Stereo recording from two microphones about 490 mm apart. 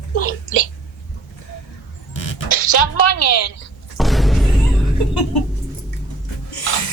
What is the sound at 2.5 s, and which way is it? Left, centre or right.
A woman's voice, left.